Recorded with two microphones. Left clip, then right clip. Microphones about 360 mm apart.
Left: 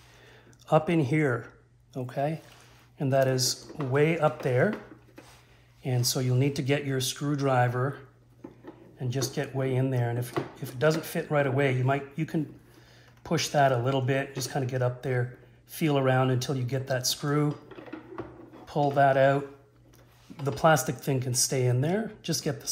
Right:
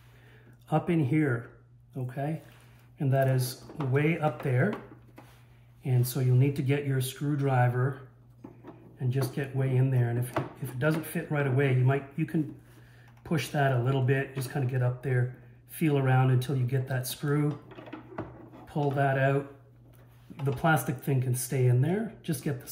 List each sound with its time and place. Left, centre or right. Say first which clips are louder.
0.7 s speech: left 5 dB; centre
5.9 s speech: left 3 dB; centre
9.1 s speech: left 2 dB; centre
20.3 s speech: left 4 dB; centre